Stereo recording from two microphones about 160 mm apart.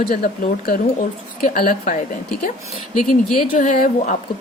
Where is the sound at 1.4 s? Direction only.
65° left (ahead or behind).